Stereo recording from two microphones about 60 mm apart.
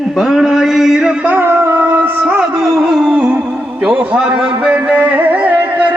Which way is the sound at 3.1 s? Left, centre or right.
Centre.